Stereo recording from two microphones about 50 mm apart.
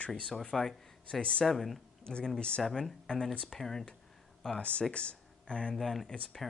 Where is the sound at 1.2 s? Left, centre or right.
Left.